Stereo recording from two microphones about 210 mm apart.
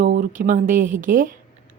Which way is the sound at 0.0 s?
35° right (ahead or behind).